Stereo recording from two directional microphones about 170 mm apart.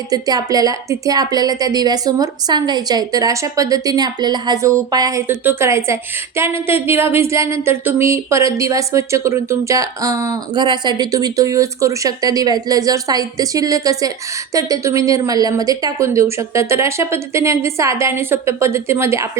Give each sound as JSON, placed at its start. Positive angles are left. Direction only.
{"t": 0.1, "sound": "a woman's voice", "side_deg": -20}